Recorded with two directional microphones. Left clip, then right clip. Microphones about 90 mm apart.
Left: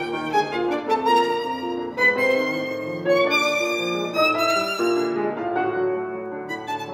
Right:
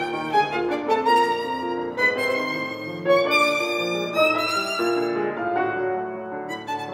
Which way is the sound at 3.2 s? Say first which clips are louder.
Even; 35° right (ahead or behind).